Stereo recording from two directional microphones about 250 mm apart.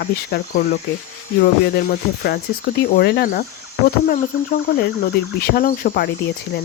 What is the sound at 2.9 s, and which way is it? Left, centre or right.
Speech, left.